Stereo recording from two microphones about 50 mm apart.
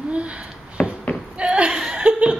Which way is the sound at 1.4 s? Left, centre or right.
Right.